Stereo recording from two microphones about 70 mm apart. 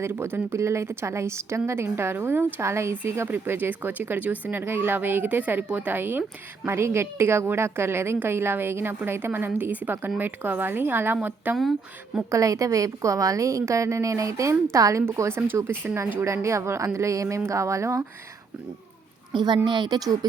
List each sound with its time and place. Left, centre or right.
0.0 s speech: right
3.2 s a woman's voice: right
4.6 s a woman's voice: right
6.7 s a woman's voice: right
12.3 s a woman's voice: right
19.3 s a woman's voice: right